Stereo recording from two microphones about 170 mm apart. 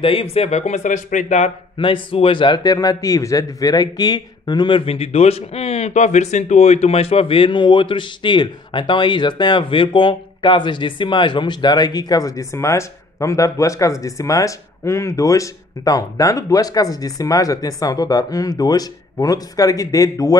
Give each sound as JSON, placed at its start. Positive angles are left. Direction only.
{"t": 0.0, "sound": "speech", "side_deg": 35}
{"t": 1.8, "sound": "a man's voice", "side_deg": 30}